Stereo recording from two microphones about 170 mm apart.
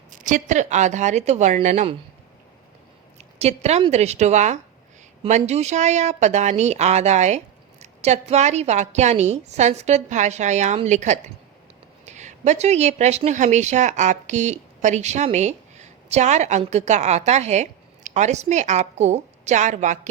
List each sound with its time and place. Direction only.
0.1 s speech: 50° right (ahead or behind)
3.3 s speech: 40° right (ahead or behind)